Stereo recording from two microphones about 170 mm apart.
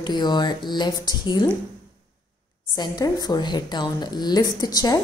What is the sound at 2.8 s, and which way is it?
A woman's voice, 20° left (ahead or behind).